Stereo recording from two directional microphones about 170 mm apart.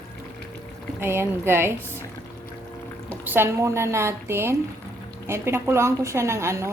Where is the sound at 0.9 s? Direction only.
15° right (ahead or behind).